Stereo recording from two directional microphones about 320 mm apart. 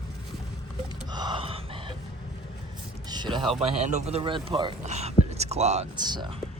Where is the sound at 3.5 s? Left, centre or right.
Centre.